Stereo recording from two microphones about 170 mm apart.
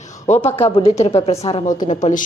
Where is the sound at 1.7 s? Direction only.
50° left (ahead or behind).